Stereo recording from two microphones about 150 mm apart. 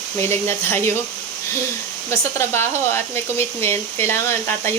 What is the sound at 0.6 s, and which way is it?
Speech, 15° left (ahead or behind).